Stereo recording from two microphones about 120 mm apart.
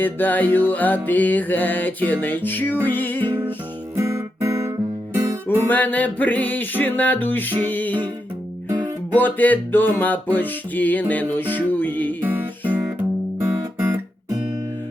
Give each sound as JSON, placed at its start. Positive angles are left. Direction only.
{"t": 0.0, "sound": "music", "side_deg": 15}
{"t": 3.9, "sound": "music", "side_deg": -25}
{"t": 5.6, "sound": "music", "side_deg": 15}
{"t": 9.1, "sound": "music", "side_deg": 15}
{"t": 12.2, "sound": "music", "side_deg": -15}
{"t": 13.4, "sound": "guitar", "side_deg": -20}